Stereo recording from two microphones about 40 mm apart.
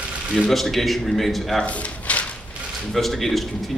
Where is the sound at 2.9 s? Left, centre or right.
Centre.